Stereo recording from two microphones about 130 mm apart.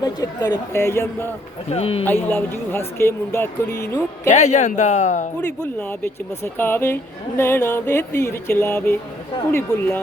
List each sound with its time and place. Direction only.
0.0 s speech: 30° left (ahead or behind)
1.7 s speech: 50° left (ahead or behind)
2.3 s speech: 20° left (ahead or behind)
4.3 s speech: 65° left (ahead or behind)
6.4 s speech: 15° left (ahead or behind)